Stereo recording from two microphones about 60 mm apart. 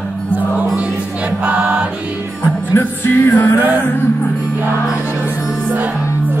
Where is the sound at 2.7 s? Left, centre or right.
Left.